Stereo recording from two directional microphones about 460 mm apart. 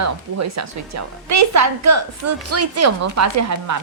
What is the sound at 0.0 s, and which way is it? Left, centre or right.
A woman's voice, right.